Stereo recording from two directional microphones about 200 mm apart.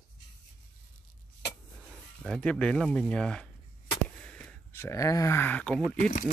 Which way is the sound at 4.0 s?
5° left (ahead or behind).